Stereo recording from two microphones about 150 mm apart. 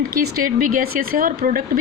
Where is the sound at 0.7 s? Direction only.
75° right (ahead or behind).